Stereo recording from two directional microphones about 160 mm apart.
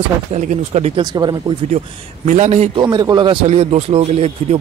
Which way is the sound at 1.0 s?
25° right (ahead or behind).